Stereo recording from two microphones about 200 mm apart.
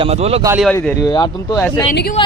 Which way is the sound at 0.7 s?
5° left (ahead or behind).